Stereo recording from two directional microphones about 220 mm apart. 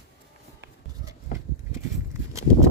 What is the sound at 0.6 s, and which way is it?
Horse, 55° right (ahead or behind).